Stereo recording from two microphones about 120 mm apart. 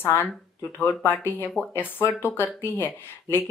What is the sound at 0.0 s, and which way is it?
Speech, 20° left (ahead or behind).